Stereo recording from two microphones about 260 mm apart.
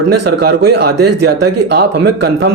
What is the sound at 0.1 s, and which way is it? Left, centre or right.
Speech, right.